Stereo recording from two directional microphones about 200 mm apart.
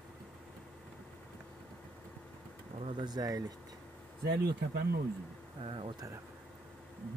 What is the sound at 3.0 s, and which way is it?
Speech, 20° right (ahead or behind).